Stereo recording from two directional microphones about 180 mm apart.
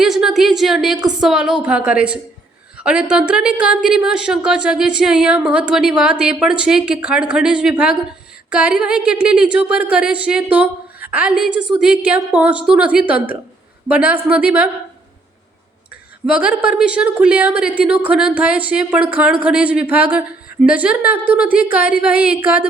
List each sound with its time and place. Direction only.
0.0 s a woman's voice: centre (ahead or behind)
16.3 s a woman's voice: 5° right (ahead or behind)
21.9 s a sound: 55° left (ahead or behind)
22.4 s a woman's voice: 10° right (ahead or behind)